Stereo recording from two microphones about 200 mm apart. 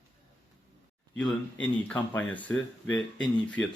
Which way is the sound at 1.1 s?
5° left (ahead or behind).